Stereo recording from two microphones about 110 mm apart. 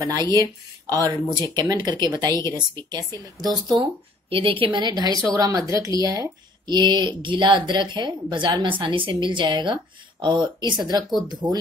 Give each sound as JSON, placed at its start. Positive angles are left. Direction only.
{"t": 0.0, "sound": "speech", "side_deg": -35}
{"t": 4.3, "sound": "speech", "side_deg": -55}
{"t": 4.6, "sound": "speech", "side_deg": -40}
{"t": 11.4, "sound": "speech", "side_deg": -10}